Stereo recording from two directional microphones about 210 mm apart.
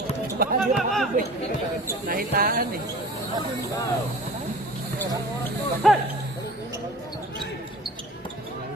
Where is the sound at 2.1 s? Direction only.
45° right (ahead or behind).